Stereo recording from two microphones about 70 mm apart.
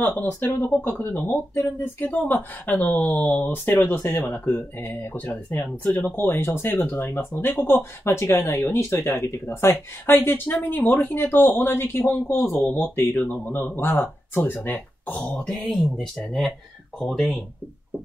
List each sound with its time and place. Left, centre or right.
0.4 s speech: left; by 15.7 s centre
17.0 s speech: centre